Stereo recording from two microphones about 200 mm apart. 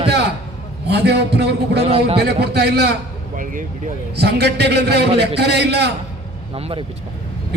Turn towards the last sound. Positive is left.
turn(degrees=-30)  # may be behind; listen again after turning